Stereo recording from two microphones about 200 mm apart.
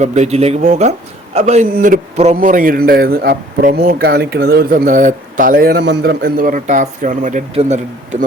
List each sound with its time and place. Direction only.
0.0 s a man's voice: 35° right (ahead or behind)